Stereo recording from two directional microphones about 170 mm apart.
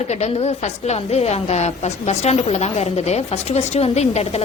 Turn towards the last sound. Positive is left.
turn(degrees=40)  # may be behind; listen again after turning